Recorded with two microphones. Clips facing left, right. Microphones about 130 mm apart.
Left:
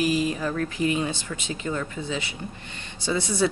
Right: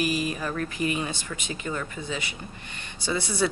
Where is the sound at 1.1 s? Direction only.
15° right (ahead or behind).